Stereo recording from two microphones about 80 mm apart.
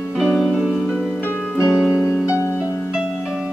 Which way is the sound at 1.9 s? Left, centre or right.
Left.